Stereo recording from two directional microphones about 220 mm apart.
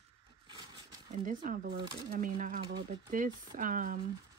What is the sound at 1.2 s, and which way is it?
Speech, 35° right (ahead or behind).